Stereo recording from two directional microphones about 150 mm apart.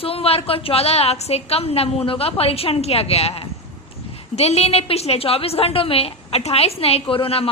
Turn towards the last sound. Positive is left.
turn(degrees=40)  # may be behind; listen again after turning